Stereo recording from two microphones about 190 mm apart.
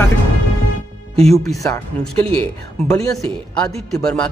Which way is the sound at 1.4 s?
15° left (ahead or behind).